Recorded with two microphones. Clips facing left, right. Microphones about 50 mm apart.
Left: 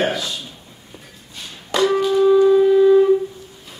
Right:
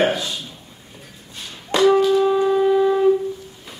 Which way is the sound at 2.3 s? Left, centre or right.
Centre.